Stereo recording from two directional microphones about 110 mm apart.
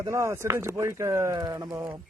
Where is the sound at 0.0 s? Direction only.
25° right (ahead or behind).